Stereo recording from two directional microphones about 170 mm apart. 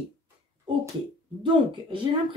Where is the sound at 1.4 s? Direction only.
30° right (ahead or behind).